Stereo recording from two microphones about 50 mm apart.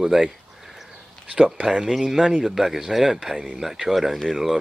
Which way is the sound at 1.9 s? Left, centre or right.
Centre.